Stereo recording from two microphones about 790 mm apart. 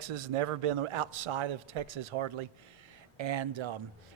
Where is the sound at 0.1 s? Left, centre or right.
Right.